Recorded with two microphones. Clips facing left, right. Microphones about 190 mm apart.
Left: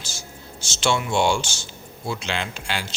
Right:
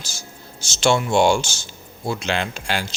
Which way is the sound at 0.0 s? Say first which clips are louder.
Even; 40° right (ahead or behind).